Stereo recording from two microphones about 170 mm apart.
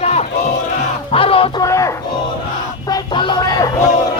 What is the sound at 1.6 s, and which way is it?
Music, 20° left (ahead or behind).